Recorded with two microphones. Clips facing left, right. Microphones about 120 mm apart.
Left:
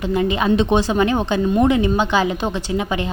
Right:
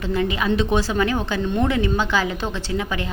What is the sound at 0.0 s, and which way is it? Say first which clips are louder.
A woman's voice: left 4 dB; 20° left (ahead or behind).